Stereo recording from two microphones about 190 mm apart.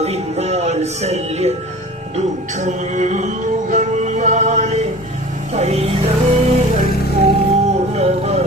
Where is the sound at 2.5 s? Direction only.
40° right (ahead or behind).